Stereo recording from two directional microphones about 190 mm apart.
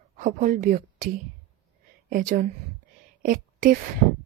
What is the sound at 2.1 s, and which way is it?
Speech, 45° right (ahead or behind).